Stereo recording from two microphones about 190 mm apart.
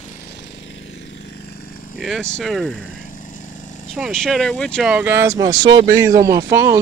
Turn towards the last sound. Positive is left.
turn(degrees=-15)  # may be behind; listen again after turning